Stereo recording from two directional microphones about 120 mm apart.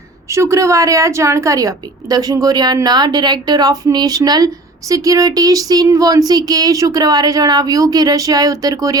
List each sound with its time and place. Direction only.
0.3 s a woman's voice: 25° right (ahead or behind)